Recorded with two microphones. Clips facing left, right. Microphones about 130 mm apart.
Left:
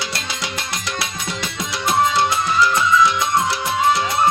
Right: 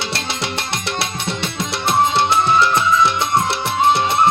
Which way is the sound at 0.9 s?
25° right (ahead or behind).